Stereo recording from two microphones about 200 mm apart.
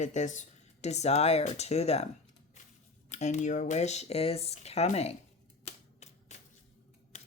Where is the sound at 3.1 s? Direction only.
35° left (ahead or behind).